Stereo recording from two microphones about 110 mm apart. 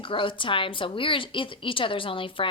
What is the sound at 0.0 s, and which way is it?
A woman's voice, 50° left (ahead or behind).